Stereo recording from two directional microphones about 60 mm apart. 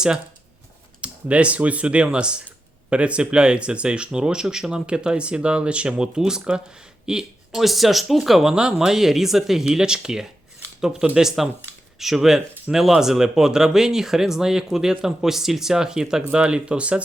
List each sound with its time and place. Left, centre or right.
1.0 s speech: right